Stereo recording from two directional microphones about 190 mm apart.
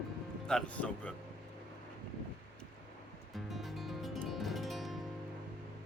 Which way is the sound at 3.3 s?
Centre (ahead or behind).